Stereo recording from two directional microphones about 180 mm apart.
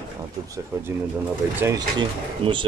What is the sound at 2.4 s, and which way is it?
Speech, 30° right (ahead or behind).